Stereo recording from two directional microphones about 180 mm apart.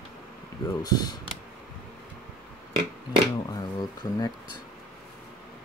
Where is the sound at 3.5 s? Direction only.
20° left (ahead or behind).